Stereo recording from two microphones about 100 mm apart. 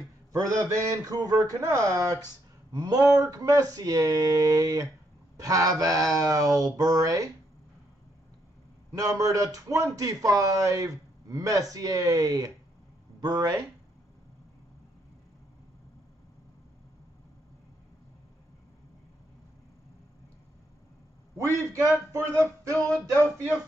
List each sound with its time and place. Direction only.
0.3 s speech: 35° right (ahead or behind)
2.7 s speech: 45° right (ahead or behind)
8.9 s speech: 35° right (ahead or behind)
21.4 s speech: 35° right (ahead or behind)
22.1 s a sound: 30° right (ahead or behind)